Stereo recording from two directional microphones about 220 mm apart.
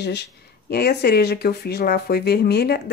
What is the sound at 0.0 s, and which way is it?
Speech, 50° left (ahead or behind).